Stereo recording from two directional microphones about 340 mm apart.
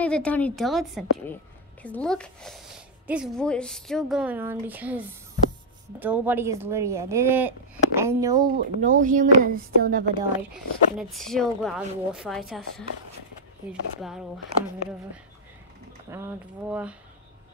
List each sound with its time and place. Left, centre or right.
0.0 s a woman's voice: centre
8.5 s speech: right
10.5 s a woman's voice: centre
16.1 s a woman's voice: centre